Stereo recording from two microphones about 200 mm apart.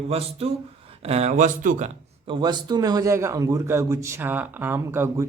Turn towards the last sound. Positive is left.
turn(degrees=-15)  # may be behind; listen again after turning